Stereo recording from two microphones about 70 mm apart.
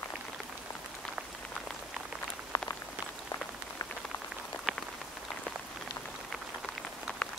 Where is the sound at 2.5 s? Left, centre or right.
Left.